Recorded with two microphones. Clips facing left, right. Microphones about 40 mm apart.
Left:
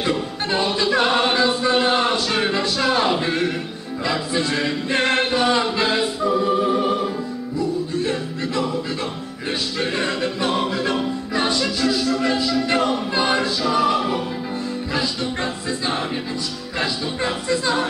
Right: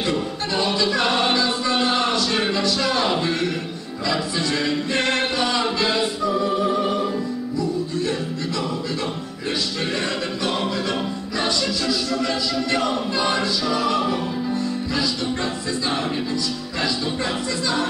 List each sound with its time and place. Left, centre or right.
0.5 s a capella: left
2.5 s music: left
8.0 s music: left
9.8 s music: left